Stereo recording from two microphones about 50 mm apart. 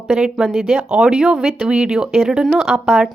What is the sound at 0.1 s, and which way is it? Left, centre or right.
Speech, centre.